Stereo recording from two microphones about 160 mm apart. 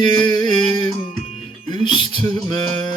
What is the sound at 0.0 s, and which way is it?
Music, 25° left (ahead or behind).